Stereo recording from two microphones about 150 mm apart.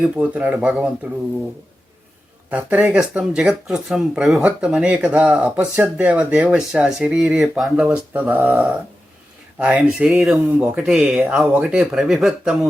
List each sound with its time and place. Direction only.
0.0 s speech: 10° right (ahead or behind)
2.5 s speech: 10° right (ahead or behind)